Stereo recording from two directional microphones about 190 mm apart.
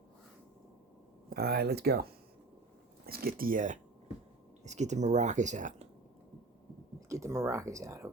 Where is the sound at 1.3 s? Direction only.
55° right (ahead or behind); by 5.9 s 40° right (ahead or behind).